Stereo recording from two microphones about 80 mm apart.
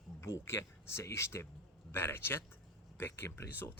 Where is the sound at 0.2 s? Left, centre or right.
Left.